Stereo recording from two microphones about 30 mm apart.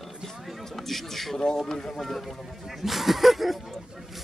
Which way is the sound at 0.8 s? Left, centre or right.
Centre.